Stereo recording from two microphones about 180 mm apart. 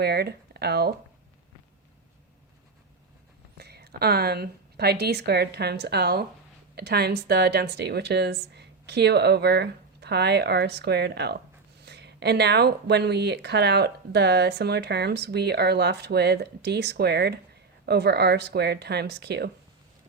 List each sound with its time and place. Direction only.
0.0 s speech: 65° right (ahead or behind)
3.6 s a woman's voice: 60° right (ahead or behind)